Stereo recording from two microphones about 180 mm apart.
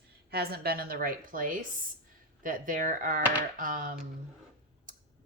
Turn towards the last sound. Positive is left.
turn(degrees=-50)  # may be behind; listen again after turning